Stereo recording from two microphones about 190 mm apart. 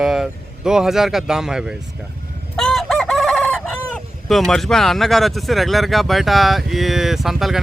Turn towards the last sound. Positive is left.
turn(degrees=0)  # may be behind; listen again after turning